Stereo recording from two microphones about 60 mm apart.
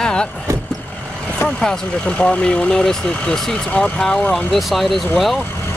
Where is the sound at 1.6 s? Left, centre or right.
Centre.